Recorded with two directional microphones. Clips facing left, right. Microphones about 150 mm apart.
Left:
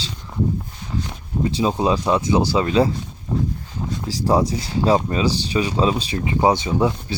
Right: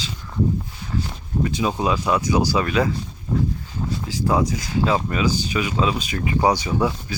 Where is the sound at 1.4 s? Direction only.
30° left (ahead or behind).